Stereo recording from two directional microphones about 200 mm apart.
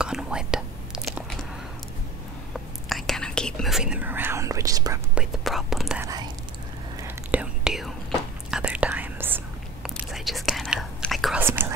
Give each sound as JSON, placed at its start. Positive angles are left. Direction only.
{"t": 0.0, "sound": "whispering", "side_deg": -5}
{"t": 2.9, "sound": "whispering", "side_deg": 0}
{"t": 5.1, "sound": "whispering", "side_deg": 0}
{"t": 6.0, "sound": "whispering", "side_deg": -20}
{"t": 7.0, "sound": "whispering", "side_deg": -5}
{"t": 11.4, "sound": "whispering", "side_deg": -10}